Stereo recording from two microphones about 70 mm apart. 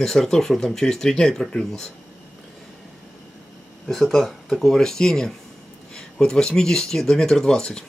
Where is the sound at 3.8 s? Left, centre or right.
Centre.